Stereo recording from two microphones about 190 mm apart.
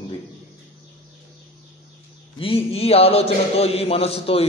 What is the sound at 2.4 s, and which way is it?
A man's voice, 30° left (ahead or behind).